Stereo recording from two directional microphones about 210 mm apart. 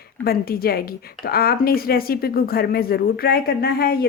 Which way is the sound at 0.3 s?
45° left (ahead or behind).